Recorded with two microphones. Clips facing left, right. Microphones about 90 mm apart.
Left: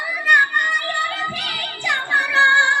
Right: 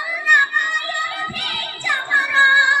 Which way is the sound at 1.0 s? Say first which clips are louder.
Left 1 dB; centre (ahead or behind).